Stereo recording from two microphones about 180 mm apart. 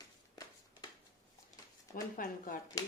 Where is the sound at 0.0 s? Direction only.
20° left (ahead or behind).